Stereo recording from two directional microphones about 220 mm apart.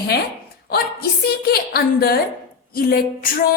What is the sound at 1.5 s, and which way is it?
Speech, 45° left (ahead or behind).